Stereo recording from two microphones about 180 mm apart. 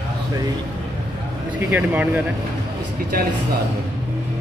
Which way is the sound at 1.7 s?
10° right (ahead or behind).